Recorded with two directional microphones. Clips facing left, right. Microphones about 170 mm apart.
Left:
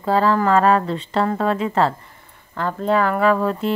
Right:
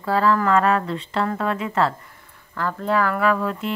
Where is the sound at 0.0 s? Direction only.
30° left (ahead or behind).